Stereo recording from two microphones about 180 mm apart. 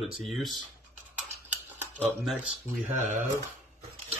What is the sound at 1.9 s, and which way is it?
Speech, 10° left (ahead or behind).